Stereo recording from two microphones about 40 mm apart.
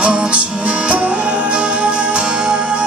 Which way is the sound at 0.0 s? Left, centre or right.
Right.